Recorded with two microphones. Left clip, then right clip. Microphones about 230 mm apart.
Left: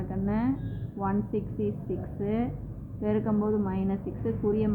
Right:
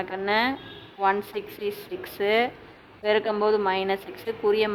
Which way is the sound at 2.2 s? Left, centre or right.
Right.